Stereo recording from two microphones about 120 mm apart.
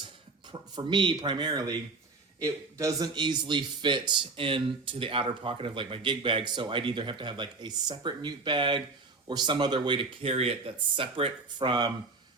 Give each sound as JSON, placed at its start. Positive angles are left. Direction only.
{"t": 0.5, "sound": "a man's voice", "side_deg": -40}
{"t": 3.2, "sound": "speech", "side_deg": -40}